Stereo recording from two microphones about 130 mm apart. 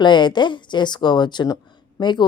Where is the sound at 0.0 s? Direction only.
35° left (ahead or behind).